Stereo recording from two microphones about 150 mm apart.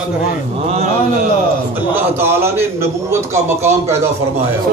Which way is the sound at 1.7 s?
15° right (ahead or behind).